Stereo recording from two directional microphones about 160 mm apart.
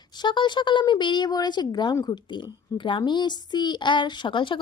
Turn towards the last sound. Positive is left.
turn(degrees=30)  # may be behind; listen again after turning